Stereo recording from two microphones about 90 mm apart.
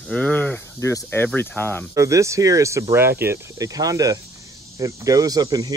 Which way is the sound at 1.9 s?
35° right (ahead or behind).